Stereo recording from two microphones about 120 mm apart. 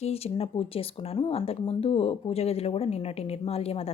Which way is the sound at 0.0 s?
55° left (ahead or behind).